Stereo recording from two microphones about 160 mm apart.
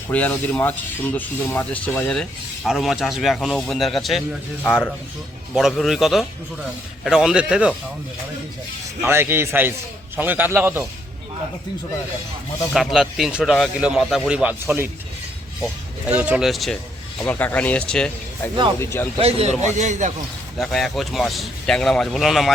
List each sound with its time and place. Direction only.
0.1 s speech: 10° left (ahead or behind)
4.6 s speech: 10° left (ahead or behind)
5.5 s speech: centre (ahead or behind)
9.0 s a man's voice: 15° right (ahead or behind)
12.7 s speech: centre (ahead or behind)
16.0 s speech: 10° right (ahead or behind)
17.2 s speech: 10° left (ahead or behind)
18.8 s speech: 15° left (ahead or behind)
19.2 s a man's voice: 45° right (ahead or behind)
20.6 s speech: centre (ahead or behind)